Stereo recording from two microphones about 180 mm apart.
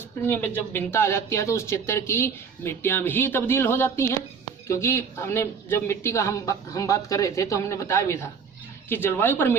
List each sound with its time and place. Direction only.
0.3 s speech: 10° left (ahead or behind)